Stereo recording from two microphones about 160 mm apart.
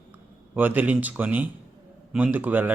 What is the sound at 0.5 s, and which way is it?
Speech, 10° right (ahead or behind).